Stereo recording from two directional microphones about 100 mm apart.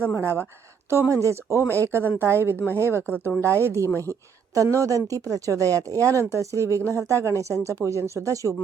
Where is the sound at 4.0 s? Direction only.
30° right (ahead or behind).